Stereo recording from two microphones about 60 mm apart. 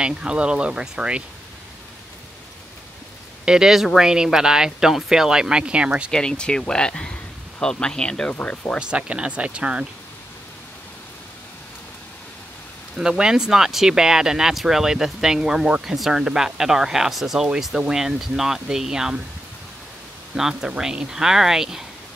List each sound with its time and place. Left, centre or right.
0.0 s speech: centre
3.4 s speech: centre
6.1 s speech: centre
8.7 s speech: centre
13.2 s speech: centre
20.3 s speech: centre